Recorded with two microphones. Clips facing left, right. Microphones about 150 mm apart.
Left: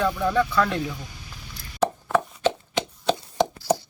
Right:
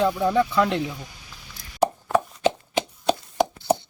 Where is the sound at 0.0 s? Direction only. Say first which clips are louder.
Right 2 dB; 20° right (ahead or behind).